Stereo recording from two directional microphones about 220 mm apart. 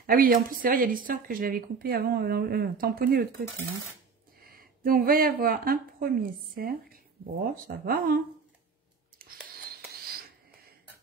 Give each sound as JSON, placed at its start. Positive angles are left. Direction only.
{"t": 0.0, "sound": "speech", "side_deg": -40}
{"t": 4.5, "sound": "speech", "side_deg": -40}
{"t": 9.7, "sound": "a sound", "side_deg": -45}